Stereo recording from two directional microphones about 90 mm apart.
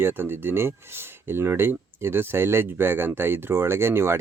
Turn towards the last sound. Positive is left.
turn(degrees=-30)  # may be behind; listen again after turning